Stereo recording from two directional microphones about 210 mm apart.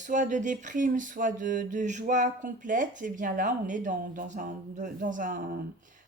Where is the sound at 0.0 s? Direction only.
35° right (ahead or behind).